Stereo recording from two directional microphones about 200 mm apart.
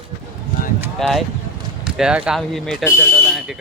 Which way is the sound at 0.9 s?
Centre (ahead or behind).